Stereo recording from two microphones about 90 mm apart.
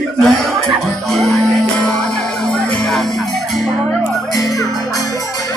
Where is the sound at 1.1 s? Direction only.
5° left (ahead or behind).